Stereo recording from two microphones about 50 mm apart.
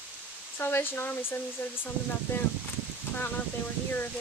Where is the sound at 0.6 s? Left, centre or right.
Left.